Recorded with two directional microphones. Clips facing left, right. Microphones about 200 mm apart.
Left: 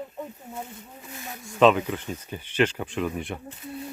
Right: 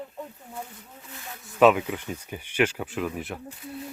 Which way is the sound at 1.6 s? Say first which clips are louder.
Even; 10° right (ahead or behind).